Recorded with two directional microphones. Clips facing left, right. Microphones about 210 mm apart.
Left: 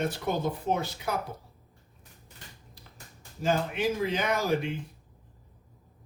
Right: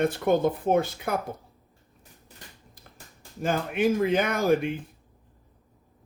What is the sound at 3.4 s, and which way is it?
Speech, 55° right (ahead or behind).